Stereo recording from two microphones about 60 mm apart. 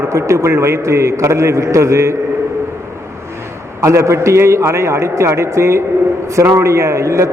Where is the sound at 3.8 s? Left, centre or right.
Right.